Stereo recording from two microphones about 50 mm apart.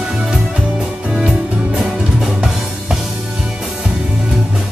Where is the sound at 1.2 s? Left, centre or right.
Right.